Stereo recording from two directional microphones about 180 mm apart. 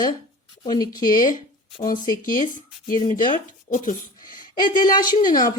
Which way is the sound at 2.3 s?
45° left (ahead or behind).